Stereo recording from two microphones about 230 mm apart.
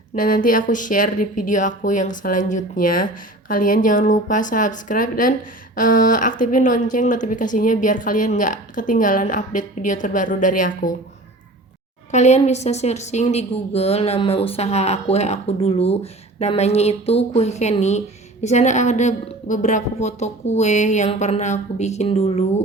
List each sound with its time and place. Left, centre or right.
0.2 s speech: left
12.1 s a woman's voice: left